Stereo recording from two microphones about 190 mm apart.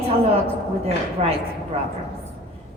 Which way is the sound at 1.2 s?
30° right (ahead or behind).